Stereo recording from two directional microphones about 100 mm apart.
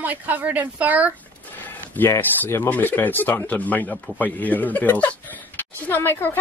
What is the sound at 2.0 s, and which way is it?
Speech, 20° left (ahead or behind).